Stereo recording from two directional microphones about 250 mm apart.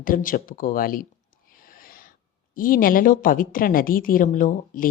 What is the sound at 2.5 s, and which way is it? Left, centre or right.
A woman's voice, left.